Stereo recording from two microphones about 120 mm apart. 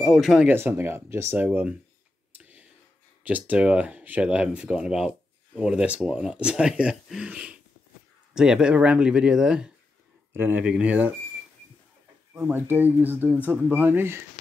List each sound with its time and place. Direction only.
0.1 s speech: centre (ahead or behind)
0.5 s speech: 15° right (ahead or behind)
2.3 s whispering: 15° right (ahead or behind)
3.3 s speech: 10° right (ahead or behind)
10.3 s speech: 20° right (ahead or behind)
12.4 s speech: 15° right (ahead or behind)